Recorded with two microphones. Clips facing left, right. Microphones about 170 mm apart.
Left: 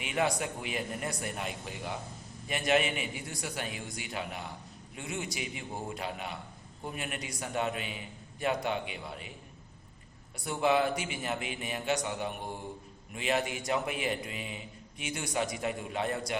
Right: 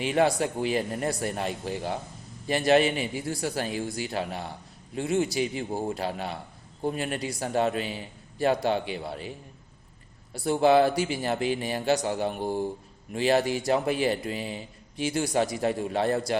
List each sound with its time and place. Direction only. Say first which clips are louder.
0.0 s a man's voice: right 7 dB; 35° right (ahead or behind)
10.3 s a man's voice: right 8 dB; 30° right (ahead or behind)